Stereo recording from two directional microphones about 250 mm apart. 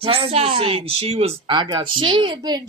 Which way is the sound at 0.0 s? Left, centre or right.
Right.